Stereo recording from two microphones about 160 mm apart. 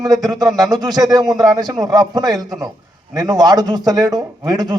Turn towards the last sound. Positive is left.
turn(degrees=-25)  # may be behind; listen again after turning